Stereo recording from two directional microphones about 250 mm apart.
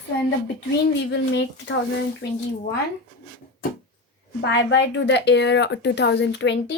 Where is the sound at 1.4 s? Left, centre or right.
Left.